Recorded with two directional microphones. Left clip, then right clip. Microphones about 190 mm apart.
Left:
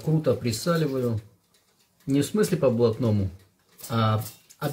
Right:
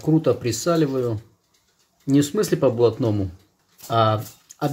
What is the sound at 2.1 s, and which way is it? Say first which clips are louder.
Speech: right 4 dB; 50° right (ahead or behind).